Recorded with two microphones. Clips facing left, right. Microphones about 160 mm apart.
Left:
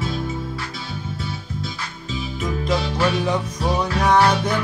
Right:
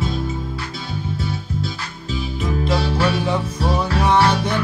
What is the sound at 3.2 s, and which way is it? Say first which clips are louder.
Music: right 1 dB; 5° right (ahead or behind).